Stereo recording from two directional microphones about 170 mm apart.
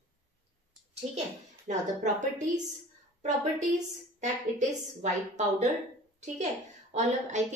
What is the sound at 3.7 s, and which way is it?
A woman's voice, 45° right (ahead or behind).